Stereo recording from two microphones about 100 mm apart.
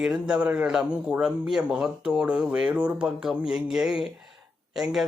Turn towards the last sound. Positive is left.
turn(degrees=-5)  # may be behind; listen again after turning